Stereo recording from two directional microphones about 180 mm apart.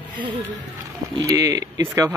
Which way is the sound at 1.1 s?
20° right (ahead or behind).